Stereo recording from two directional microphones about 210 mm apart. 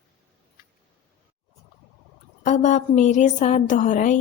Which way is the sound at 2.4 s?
35° left (ahead or behind).